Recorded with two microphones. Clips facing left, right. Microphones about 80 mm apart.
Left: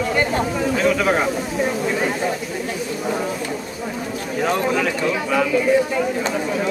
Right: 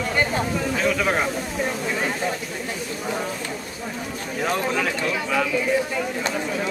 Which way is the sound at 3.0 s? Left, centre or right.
Centre.